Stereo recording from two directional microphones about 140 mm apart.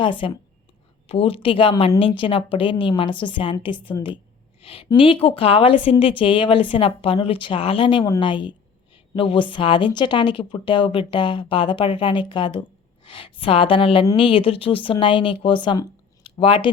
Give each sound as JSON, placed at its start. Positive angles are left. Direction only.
{"t": 0.0, "sound": "a woman's voice", "side_deg": 35}